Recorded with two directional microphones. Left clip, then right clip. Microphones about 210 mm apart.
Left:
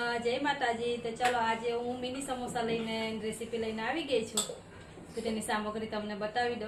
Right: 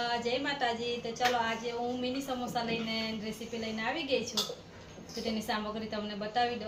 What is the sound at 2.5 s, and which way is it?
A woman's voice, 10° left (ahead or behind).